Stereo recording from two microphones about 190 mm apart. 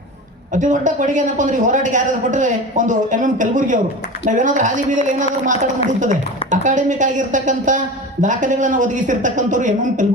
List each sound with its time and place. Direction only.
0.5 s speech: 40° right (ahead or behind)